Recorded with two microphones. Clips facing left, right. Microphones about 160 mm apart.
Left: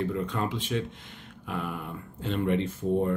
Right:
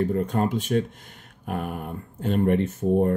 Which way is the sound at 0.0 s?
45° right (ahead or behind).